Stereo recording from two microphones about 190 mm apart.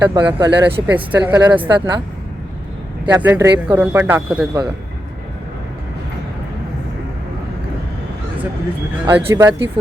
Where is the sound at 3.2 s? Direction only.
10° right (ahead or behind).